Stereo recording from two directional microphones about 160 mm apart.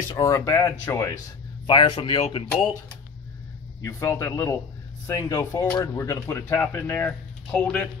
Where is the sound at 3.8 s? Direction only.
20° left (ahead or behind).